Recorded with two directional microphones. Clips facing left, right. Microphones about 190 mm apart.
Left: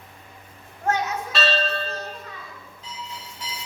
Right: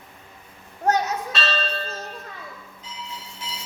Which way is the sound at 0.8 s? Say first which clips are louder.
Right 3 dB; 40° right (ahead or behind).